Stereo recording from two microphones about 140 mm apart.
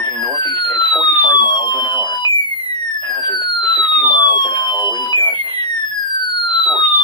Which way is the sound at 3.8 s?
30° left (ahead or behind).